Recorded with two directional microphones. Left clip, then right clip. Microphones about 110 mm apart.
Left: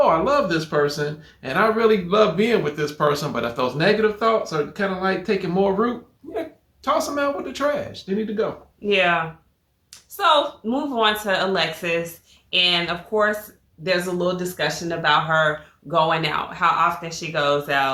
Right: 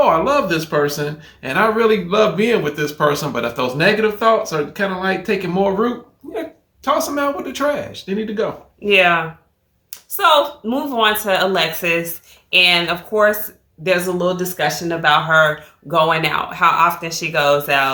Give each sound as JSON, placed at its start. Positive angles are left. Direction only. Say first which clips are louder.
{"t": 0.0, "sound": "speech", "louder": "right 3 dB", "side_deg": 5}
{"t": 8.9, "sound": "speech", "louder": "right 6 dB", "side_deg": -40}
{"t": 10.2, "sound": "speech", "louder": "right 4 dB", "side_deg": -35}